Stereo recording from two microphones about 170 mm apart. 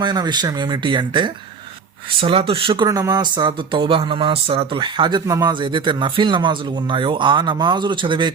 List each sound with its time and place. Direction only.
0.0 s speech: 25° right (ahead or behind)